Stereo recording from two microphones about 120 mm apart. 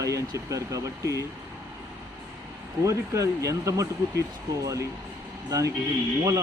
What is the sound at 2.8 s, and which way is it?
Speech, 25° right (ahead or behind).